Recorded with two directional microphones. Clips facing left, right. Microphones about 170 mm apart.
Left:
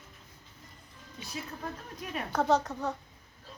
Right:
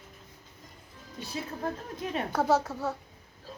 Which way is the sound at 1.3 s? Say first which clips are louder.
Right 5 dB; 30° right (ahead or behind).